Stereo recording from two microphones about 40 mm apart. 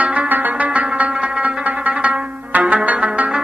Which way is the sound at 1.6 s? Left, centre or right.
Right.